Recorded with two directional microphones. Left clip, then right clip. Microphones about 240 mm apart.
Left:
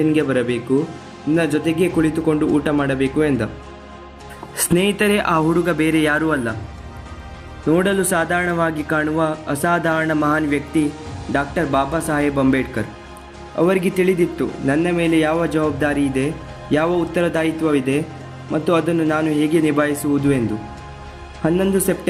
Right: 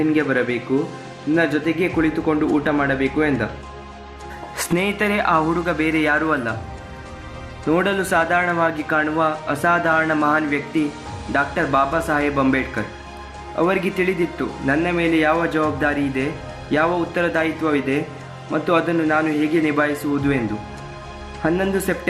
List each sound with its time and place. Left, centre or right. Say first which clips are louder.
0.1 s a man's voice: left 1 dB; left
4.5 s a man's voice: left 3 dB; left
7.7 s a man's voice: left 1 dB; left
21.4 s a man's voice: left 2 dB; left